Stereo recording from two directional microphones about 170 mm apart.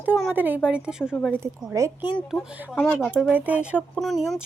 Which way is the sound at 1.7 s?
20° right (ahead or behind).